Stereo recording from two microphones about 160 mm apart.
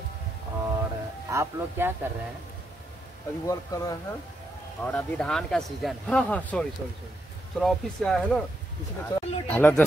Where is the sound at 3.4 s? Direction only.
20° left (ahead or behind).